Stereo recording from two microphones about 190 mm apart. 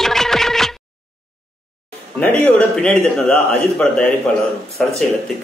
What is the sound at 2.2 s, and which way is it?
A man's voice, 5° left (ahead or behind).